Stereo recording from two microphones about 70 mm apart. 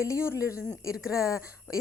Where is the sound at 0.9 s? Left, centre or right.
Centre.